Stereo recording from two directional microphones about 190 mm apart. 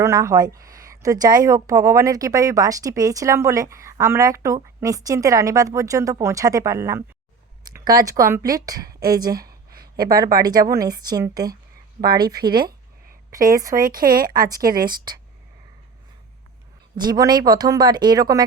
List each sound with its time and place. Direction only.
0.0 s a woman's voice: 15° right (ahead or behind)
9.7 s a sound: 50° right (ahead or behind)
10.1 s a woman's voice: 20° right (ahead or behind)
12.4 s speech: 55° right (ahead or behind)
17.0 s a woman's voice: 20° right (ahead or behind)